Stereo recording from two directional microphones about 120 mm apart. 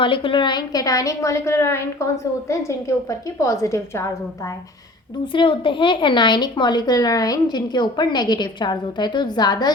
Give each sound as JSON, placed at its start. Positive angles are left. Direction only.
{"t": 0.0, "sound": "a woman's voice", "side_deg": 45}
{"t": 5.2, "sound": "a woman's voice", "side_deg": 45}